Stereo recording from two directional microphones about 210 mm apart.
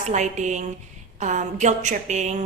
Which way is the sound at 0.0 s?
35° right (ahead or behind).